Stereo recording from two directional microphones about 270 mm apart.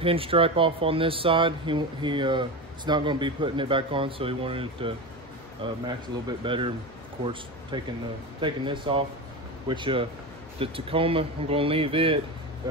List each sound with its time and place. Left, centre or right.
0.0 s speech: centre
7.7 s speech: centre